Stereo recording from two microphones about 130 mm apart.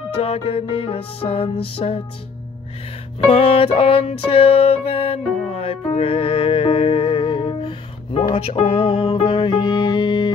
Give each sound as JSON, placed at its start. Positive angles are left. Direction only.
{"t": 0.1, "sound": "music", "side_deg": 45}
{"t": 3.3, "sound": "music", "side_deg": 50}